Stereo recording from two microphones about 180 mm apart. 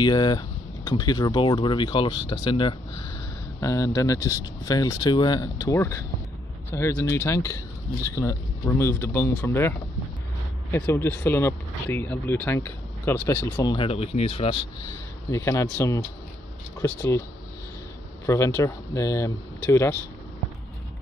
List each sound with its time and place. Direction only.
0.0 s speech: 25° left (ahead or behind)
13.8 s speech: 35° left (ahead or behind)
15.3 s speech: 15° left (ahead or behind)
18.2 s speech: 15° left (ahead or behind)